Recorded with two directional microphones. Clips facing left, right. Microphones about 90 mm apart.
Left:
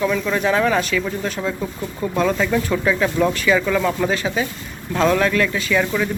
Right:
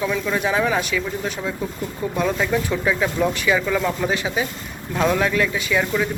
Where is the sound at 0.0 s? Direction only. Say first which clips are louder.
Left 3 dB; 10° right (ahead or behind).